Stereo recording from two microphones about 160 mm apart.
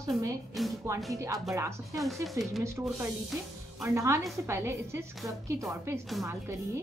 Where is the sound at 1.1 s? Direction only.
20° right (ahead or behind).